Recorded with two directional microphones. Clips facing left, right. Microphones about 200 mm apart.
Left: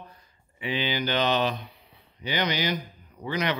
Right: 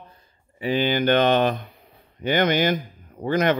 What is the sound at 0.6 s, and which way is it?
Speech, 45° right (ahead or behind).